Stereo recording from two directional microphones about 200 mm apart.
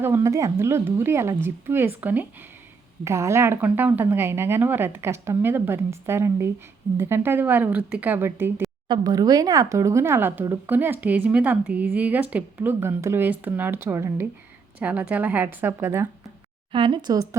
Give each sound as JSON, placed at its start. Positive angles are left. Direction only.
{"t": 0.0, "sound": "a woman's voice", "side_deg": -15}
{"t": 16.7, "sound": "speech", "side_deg": -25}